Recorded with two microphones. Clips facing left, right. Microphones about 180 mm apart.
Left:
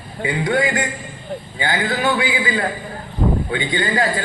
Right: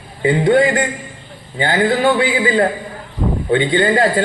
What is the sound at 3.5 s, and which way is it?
Speech, 50° right (ahead or behind).